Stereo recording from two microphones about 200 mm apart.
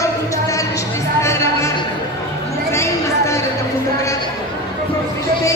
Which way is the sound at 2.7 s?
15° left (ahead or behind).